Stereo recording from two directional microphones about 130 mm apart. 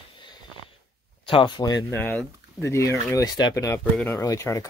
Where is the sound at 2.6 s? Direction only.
25° left (ahead or behind).